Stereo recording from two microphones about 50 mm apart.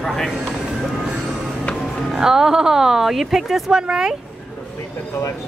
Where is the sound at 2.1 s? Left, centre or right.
Centre.